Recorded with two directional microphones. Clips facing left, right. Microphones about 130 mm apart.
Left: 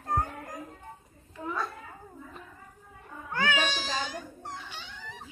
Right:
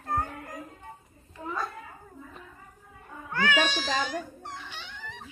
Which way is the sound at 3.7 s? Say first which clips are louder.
Right 4 dB; 45° right (ahead or behind).